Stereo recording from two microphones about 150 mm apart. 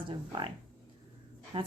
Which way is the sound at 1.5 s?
35° right (ahead or behind).